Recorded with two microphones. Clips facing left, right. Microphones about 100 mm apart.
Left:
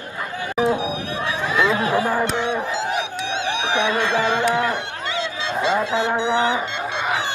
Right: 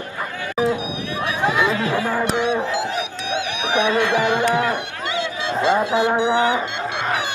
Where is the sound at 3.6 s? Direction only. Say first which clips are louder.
Right 3 dB; 15° right (ahead or behind).